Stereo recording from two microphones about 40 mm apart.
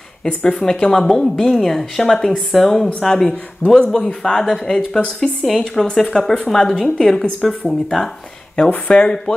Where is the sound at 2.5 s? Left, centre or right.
Centre.